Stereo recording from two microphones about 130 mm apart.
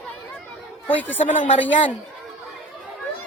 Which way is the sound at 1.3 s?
75° left (ahead or behind).